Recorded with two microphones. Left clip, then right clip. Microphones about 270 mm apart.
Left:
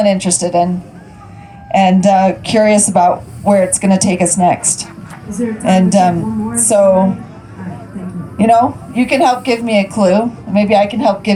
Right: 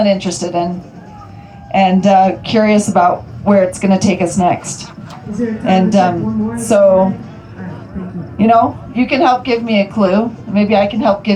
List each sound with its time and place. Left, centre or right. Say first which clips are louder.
0.0 s speech: left 1 dB; left
1.7 s speech: even; left
8.4 s speech: even; left